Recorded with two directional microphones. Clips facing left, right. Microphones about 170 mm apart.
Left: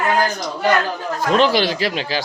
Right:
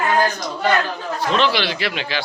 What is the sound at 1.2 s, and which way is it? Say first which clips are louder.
Speech: left 4 dB; 45° left (ahead or behind).